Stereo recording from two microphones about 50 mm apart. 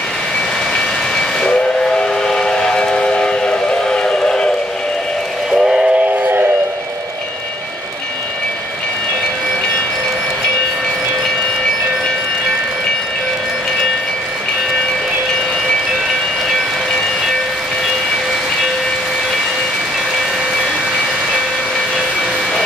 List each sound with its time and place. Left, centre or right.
1.4 s train: centre
5.5 s train: centre
5.9 s train: right